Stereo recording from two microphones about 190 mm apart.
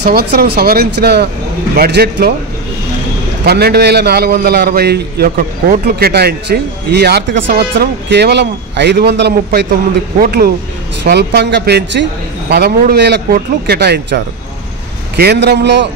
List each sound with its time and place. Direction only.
0.0 s a man's voice: 55° right (ahead or behind)
3.4 s a man's voice: 55° right (ahead or behind)
10.2 s a man's voice: 50° right (ahead or behind)